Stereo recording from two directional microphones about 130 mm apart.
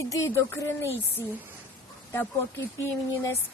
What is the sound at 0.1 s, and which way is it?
Speech, 20° left (ahead or behind).